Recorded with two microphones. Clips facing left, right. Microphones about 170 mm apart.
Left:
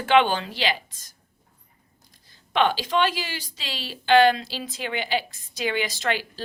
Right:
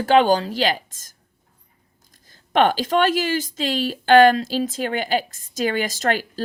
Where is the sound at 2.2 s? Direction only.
45° right (ahead or behind).